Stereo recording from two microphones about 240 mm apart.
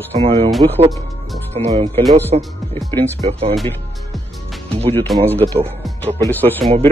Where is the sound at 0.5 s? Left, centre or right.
Centre.